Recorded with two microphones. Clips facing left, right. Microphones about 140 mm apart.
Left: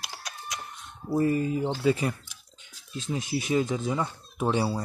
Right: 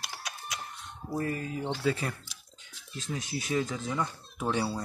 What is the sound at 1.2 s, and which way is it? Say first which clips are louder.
Speech: left 8 dB; 20° left (ahead or behind).